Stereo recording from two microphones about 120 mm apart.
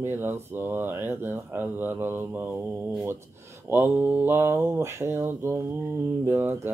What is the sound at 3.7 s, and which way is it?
Mantra, 15° right (ahead or behind).